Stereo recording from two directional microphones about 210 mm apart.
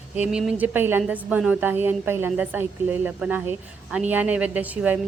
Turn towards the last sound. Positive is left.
turn(degrees=-5)  # may be behind; listen again after turning